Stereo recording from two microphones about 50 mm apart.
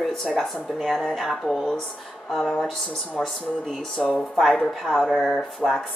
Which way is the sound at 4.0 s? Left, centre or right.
Centre.